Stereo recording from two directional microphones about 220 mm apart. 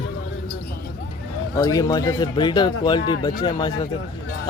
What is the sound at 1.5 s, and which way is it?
A man's voice, 15° left (ahead or behind).